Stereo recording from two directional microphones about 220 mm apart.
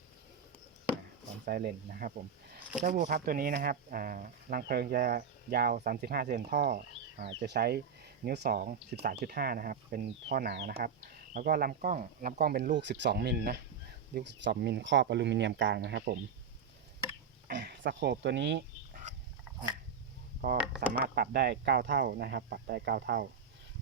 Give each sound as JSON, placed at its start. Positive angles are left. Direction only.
{"t": 1.5, "sound": "speech", "side_deg": -45}
{"t": 17.5, "sound": "speech", "side_deg": -50}
{"t": 20.6, "sound": "speech", "side_deg": -5}
{"t": 21.0, "sound": "speech", "side_deg": -45}